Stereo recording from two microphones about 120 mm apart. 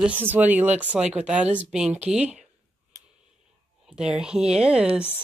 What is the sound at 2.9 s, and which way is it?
Clicking, 30° right (ahead or behind).